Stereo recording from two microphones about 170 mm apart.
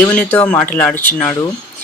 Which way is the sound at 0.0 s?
5° left (ahead or behind).